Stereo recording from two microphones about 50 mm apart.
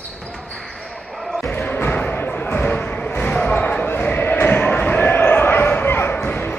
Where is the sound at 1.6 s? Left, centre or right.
Left.